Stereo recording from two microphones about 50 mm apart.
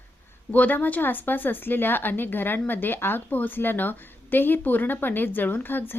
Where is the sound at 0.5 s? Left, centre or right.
Left.